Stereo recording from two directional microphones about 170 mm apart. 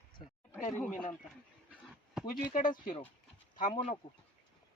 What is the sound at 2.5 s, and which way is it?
Speech, 55° left (ahead or behind).